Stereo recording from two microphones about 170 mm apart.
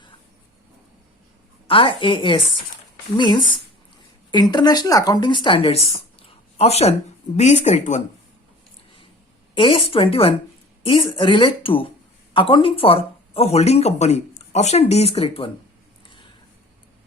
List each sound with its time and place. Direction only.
1.6 s a woman's voice: 30° left (ahead or behind)
9.6 s speech: 30° left (ahead or behind)